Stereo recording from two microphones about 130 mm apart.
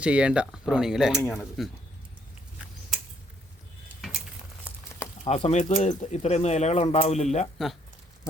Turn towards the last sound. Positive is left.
turn(degrees=60)  # may be behind; listen again after turning